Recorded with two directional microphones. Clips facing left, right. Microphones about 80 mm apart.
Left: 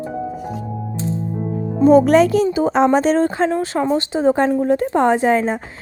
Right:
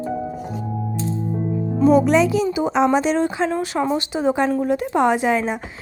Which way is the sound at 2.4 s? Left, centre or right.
Left.